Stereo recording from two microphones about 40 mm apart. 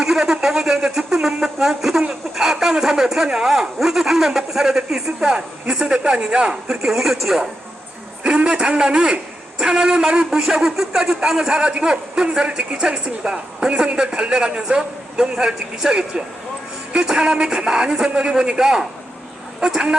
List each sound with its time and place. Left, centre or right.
0.0 s speech: centre
6.7 s speech: centre
8.2 s a man's voice: right